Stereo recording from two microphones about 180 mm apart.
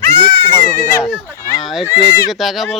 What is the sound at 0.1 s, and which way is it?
Goat, 25° right (ahead or behind).